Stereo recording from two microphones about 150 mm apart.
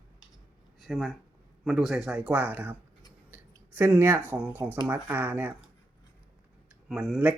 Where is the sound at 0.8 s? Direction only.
5° left (ahead or behind); by 2.8 s 15° right (ahead or behind).